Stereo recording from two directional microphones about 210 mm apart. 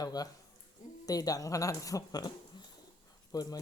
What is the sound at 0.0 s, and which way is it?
Speech, 20° left (ahead or behind).